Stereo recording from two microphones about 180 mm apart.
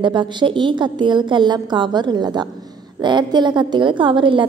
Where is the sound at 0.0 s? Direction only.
25° right (ahead or behind).